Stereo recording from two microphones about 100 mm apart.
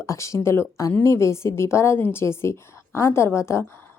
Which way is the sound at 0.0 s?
30° left (ahead or behind).